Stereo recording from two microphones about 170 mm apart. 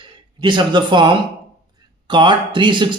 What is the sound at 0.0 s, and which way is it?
Speech, 25° right (ahead or behind).